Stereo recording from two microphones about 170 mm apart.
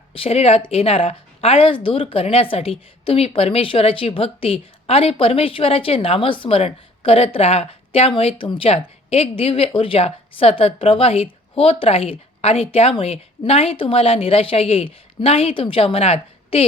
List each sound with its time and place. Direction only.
0.1 s speech: 35° left (ahead or behind)